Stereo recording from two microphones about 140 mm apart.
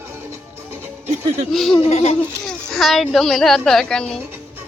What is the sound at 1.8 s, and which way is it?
Speech, 50° left (ahead or behind).